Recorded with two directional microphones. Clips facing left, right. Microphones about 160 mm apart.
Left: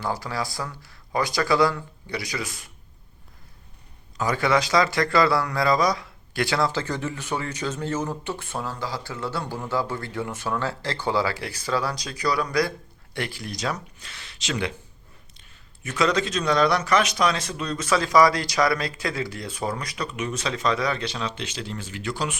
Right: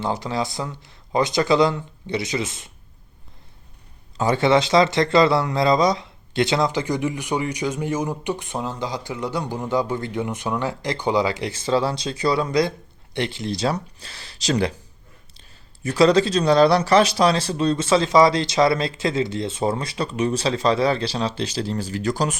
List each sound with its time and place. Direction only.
0.0 s speech: 20° right (ahead or behind)
4.2 s speech: 25° right (ahead or behind)